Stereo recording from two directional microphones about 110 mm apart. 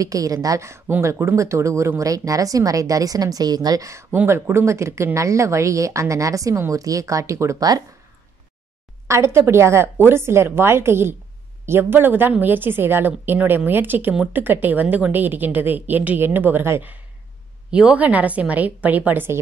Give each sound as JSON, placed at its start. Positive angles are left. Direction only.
{"t": 0.0, "sound": "speech", "side_deg": -30}
{"t": 4.1, "sound": "speech", "side_deg": -20}
{"t": 9.0, "sound": "a woman's voice", "side_deg": -25}